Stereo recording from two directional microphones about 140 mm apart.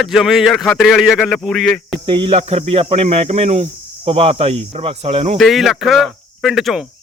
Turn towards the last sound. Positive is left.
turn(degrees=0)  # may be behind; listen again after turning